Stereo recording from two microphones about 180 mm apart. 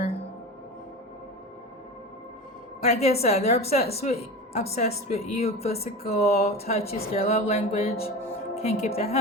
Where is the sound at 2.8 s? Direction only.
35° left (ahead or behind).